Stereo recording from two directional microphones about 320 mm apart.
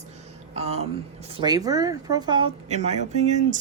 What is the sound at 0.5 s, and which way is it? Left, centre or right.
Speech, centre.